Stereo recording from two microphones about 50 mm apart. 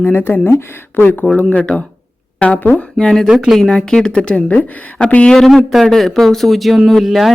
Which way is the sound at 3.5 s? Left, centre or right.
Centre.